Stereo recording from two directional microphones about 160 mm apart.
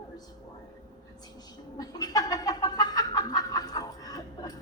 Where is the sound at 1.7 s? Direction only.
25° left (ahead or behind).